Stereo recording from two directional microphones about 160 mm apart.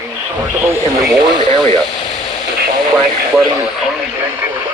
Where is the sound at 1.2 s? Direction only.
25° right (ahead or behind).